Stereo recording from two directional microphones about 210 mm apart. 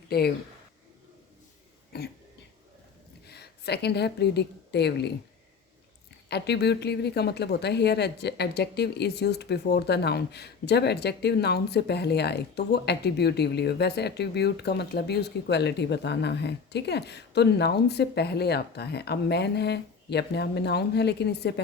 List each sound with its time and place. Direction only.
0.1 s a woman's voice: 50° left (ahead or behind)
1.9 s cough: 50° left (ahead or behind)
3.2 s a woman's voice: 50° left (ahead or behind)
6.2 s a woman's voice: 50° left (ahead or behind)